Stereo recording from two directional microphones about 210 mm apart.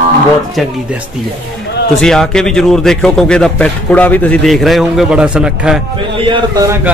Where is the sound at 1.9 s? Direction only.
5° left (ahead or behind).